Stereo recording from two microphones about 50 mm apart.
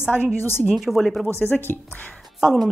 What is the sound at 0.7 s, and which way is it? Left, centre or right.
Speech, centre.